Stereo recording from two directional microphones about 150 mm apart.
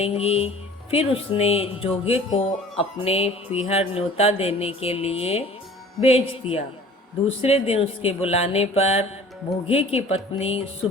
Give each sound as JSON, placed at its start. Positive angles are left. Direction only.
{"t": 0.0, "sound": "speech", "side_deg": 45}